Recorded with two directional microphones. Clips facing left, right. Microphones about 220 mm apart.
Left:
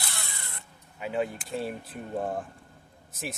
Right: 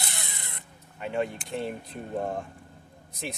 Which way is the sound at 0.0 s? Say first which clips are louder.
Right 1 dB; 20° right (ahead or behind).